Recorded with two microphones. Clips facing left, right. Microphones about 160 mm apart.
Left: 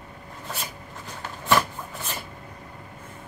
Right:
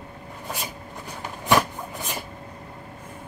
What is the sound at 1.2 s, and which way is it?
Cupboard open or close, 15° right (ahead or behind).